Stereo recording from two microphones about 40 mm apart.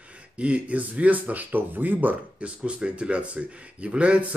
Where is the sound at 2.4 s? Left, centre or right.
Right.